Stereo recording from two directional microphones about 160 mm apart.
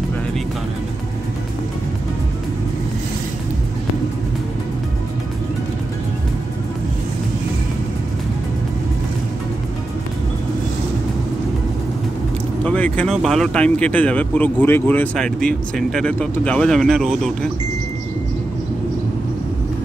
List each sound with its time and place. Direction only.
12.6 s speech: 10° left (ahead or behind)